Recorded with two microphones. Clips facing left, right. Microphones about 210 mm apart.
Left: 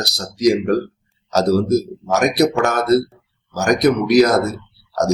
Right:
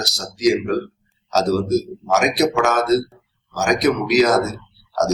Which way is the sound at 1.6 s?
60° left (ahead or behind).